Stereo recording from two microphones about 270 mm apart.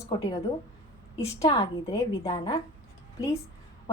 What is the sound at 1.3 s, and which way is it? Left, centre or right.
A woman's voice, centre.